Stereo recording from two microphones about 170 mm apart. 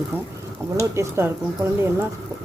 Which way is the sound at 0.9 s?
15° right (ahead or behind).